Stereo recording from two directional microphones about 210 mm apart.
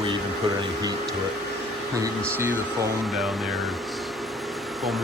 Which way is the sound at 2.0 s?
15° right (ahead or behind).